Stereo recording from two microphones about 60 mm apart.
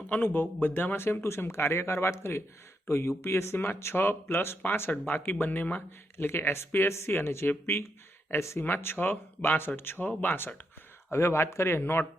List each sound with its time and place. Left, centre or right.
0.1 s speech: left
4.6 s speech: left
6.1 s speech: left
8.5 s speech: left
11.1 s speech: left